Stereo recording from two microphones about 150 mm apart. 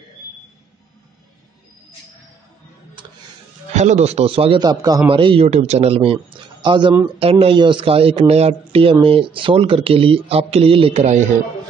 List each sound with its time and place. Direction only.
3.0 s music: 35° right (ahead or behind)
3.7 s speech: 50° right (ahead or behind)